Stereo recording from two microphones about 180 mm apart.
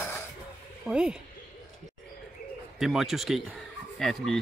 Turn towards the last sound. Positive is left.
turn(degrees=0)  # may be behind; listen again after turning